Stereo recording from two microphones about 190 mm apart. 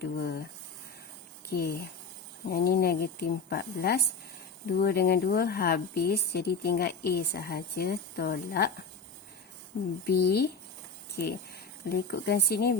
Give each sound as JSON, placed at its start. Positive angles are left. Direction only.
{"t": 0.0, "sound": "speech", "side_deg": 55}
{"t": 1.5, "sound": "speech", "side_deg": 55}
{"t": 10.1, "sound": "speech", "side_deg": 60}
{"t": 11.9, "sound": "speech", "side_deg": 55}